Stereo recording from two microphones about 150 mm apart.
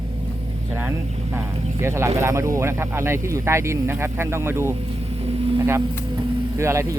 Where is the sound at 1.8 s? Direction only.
20° right (ahead or behind).